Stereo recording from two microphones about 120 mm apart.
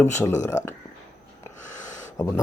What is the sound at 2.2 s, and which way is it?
Speech, 25° left (ahead or behind).